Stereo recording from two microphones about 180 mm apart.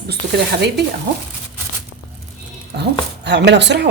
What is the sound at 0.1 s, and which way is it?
Speech, 65° right (ahead or behind).